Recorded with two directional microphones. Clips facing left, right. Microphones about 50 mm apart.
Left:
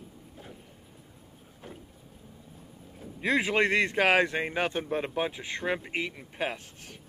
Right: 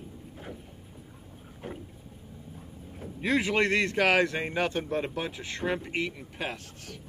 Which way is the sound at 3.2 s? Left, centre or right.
Centre.